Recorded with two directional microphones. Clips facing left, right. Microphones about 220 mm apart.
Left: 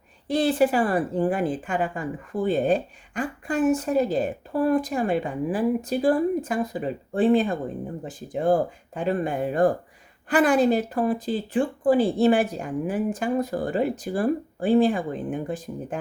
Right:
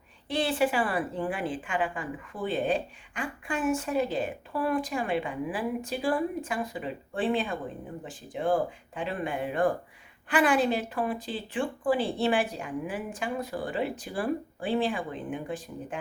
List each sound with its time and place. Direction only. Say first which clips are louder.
0.3 s a woman's voice: left 6 dB; 40° left (ahead or behind)